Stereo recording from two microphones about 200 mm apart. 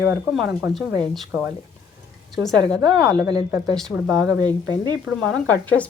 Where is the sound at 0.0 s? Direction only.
5° right (ahead or behind).